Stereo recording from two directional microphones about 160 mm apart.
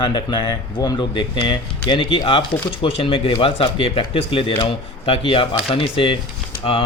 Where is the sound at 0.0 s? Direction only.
30° left (ahead or behind).